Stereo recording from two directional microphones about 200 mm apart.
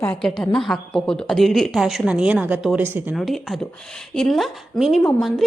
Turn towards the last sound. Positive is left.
turn(degrees=0)  # may be behind; listen again after turning